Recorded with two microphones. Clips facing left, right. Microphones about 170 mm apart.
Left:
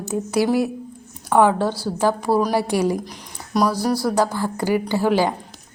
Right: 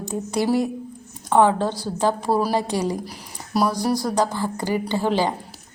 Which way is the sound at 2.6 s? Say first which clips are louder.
Left 3 dB; 10° left (ahead or behind).